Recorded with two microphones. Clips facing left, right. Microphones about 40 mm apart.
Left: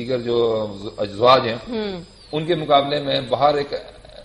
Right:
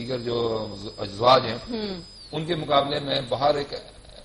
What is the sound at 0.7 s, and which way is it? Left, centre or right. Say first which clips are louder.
Speech: left 7 dB; left.